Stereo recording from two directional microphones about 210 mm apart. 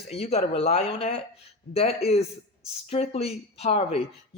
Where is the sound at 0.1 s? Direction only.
30° left (ahead or behind).